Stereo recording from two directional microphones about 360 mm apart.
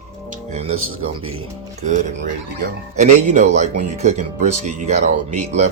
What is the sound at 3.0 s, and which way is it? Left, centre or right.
Speech, centre.